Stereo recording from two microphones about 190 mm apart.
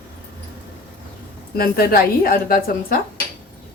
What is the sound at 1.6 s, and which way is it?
A woman's voice, 50° left (ahead or behind).